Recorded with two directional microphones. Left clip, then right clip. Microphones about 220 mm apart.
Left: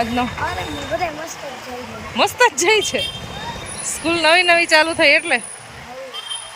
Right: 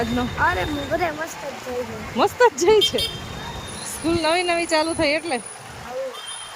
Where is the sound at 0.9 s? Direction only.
25° right (ahead or behind).